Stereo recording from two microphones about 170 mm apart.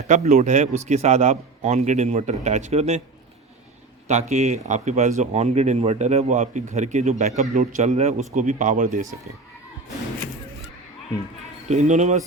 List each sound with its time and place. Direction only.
0.1 s speech: 45° right (ahead or behind)
4.1 s speech: 45° right (ahead or behind)
11.7 s speech: 45° right (ahead or behind)